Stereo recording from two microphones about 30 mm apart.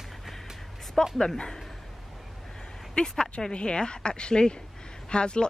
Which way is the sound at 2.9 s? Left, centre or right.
Left.